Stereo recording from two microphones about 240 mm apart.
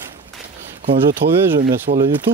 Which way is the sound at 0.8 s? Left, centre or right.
Right.